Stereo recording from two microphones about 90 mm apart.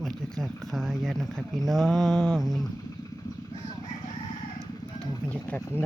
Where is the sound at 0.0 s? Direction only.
Centre (ahead or behind).